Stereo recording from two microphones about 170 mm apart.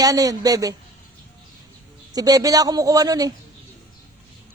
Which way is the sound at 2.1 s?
20° right (ahead or behind).